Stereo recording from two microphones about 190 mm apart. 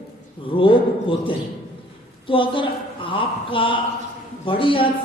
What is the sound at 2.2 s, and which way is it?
A woman's voice, 25° left (ahead or behind).